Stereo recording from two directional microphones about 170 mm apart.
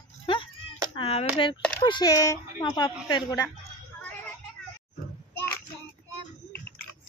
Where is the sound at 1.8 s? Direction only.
25° left (ahead or behind).